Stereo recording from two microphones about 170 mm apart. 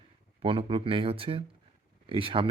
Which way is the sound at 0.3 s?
30° right (ahead or behind).